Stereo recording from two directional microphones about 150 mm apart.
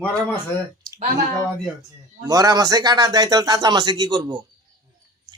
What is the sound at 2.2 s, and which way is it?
A man's voice, 25° right (ahead or behind).